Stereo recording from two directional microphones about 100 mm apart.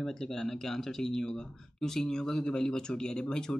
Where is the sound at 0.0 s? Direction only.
5° left (ahead or behind).